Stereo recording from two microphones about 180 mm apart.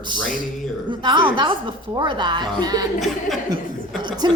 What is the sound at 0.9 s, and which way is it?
A woman's voice, 25° right (ahead or behind).